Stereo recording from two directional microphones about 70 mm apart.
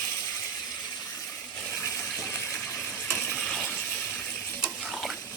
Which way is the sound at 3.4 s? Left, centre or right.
Centre.